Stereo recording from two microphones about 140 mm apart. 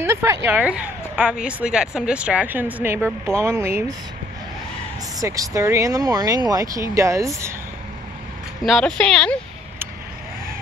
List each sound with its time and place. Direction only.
0.0 s speech: 15° right (ahead or behind)
5.2 s speech: 25° right (ahead or behind)
8.6 s speech: 5° left (ahead or behind)